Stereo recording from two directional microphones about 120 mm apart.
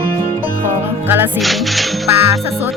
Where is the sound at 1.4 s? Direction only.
Centre (ahead or behind).